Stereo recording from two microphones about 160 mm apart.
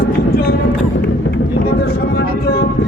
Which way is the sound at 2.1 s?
75° left (ahead or behind).